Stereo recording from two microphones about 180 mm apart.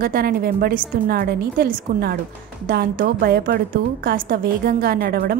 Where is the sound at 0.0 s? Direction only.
55° right (ahead or behind).